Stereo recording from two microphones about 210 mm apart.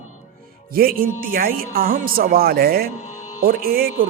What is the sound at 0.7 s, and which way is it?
A man's voice, 45° right (ahead or behind).